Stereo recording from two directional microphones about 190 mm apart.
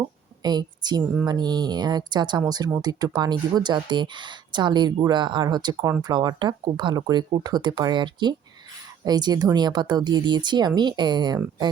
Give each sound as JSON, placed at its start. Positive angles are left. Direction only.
{"t": 0.4, "sound": "a woman's voice", "side_deg": -20}